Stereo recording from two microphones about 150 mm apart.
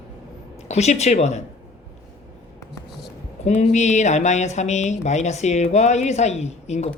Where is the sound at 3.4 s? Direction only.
50° left (ahead or behind).